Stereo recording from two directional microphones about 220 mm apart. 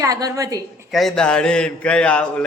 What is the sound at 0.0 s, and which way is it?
Speech, 15° right (ahead or behind).